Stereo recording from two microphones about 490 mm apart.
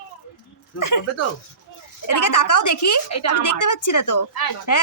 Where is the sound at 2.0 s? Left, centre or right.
Left.